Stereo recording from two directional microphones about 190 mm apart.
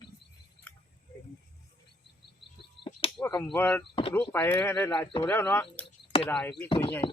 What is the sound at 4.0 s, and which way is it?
Speech, 30° left (ahead or behind).